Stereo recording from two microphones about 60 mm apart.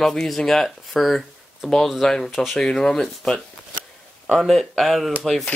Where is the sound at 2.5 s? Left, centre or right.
Centre.